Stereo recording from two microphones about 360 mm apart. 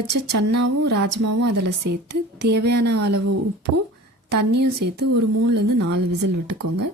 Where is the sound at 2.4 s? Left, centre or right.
Right.